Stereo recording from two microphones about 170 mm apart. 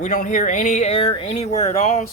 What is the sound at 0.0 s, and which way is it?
Speech, 50° left (ahead or behind).